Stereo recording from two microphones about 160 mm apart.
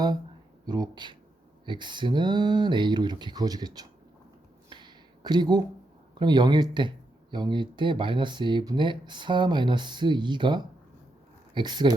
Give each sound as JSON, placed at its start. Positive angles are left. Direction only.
{"t": 0.6, "sound": "speech", "side_deg": -25}
{"t": 4.7, "sound": "a sound", "side_deg": -25}
{"t": 6.1, "sound": "speech", "side_deg": -25}